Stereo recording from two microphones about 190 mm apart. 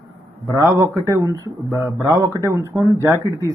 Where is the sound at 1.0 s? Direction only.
15° right (ahead or behind).